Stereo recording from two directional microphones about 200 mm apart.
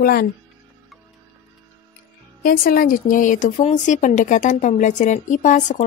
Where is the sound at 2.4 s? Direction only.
45° left (ahead or behind).